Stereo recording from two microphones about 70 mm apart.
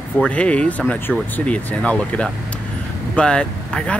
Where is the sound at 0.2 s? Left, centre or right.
Centre.